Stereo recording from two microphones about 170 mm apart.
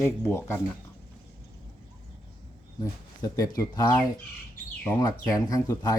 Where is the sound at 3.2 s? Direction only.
20° left (ahead or behind).